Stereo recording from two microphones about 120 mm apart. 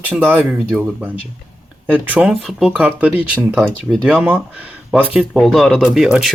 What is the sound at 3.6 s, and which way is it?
Speech, centre (ahead or behind).